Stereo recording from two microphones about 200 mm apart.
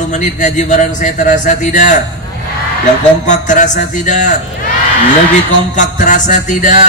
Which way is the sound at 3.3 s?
40° left (ahead or behind).